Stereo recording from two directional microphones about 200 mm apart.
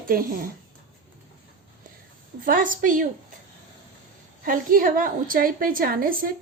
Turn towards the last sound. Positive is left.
turn(degrees=-45)  # may be behind; listen again after turning